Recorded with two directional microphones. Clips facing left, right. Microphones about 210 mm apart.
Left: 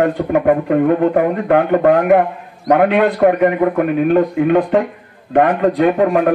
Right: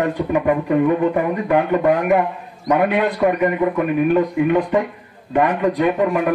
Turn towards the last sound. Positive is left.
turn(degrees=55)  # may be behind; listen again after turning